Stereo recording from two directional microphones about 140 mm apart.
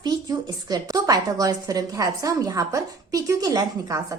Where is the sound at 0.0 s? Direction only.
30° right (ahead or behind).